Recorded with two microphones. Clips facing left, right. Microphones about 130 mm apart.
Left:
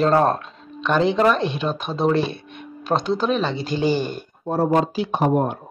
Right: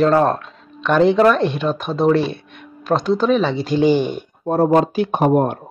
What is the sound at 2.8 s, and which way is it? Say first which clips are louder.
Speech: right 4 dB; 5° right (ahead or behind).